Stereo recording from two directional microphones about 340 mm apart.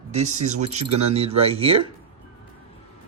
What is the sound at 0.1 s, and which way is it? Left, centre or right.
Speech, centre.